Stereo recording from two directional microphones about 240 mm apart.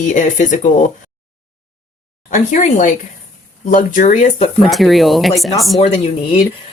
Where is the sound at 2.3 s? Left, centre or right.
Left.